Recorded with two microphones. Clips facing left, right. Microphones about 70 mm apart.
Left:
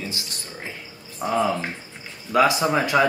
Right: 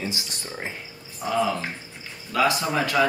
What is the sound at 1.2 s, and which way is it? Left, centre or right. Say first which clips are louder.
Speech: left 3 dB; left.